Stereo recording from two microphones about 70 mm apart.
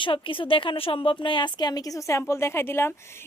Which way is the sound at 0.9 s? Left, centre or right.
Left.